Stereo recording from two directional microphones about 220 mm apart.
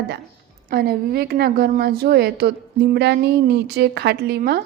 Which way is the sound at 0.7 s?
45° right (ahead or behind).